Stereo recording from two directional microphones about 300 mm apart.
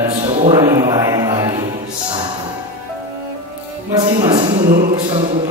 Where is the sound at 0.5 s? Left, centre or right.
Centre.